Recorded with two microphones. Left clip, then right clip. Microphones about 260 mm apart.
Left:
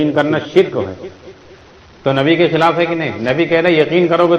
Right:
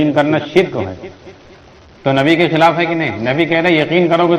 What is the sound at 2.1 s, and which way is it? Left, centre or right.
A man's voice, right.